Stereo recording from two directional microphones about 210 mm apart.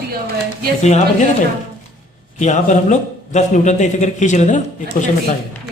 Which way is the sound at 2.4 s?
35° left (ahead or behind).